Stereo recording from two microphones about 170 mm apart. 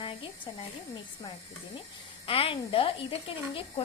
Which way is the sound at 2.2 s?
35° left (ahead or behind).